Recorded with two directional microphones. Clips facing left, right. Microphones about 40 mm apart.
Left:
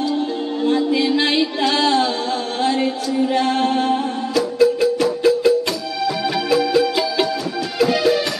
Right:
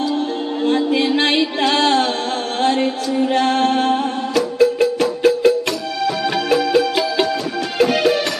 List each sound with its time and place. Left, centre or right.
0.7 s music: right
3.3 s music: right